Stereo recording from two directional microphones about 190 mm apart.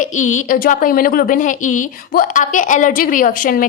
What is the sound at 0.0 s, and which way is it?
A woman's voice, 40° left (ahead or behind).